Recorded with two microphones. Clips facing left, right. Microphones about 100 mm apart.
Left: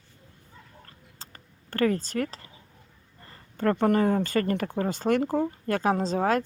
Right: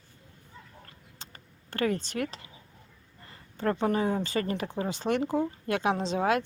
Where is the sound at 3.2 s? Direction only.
45° left (ahead or behind).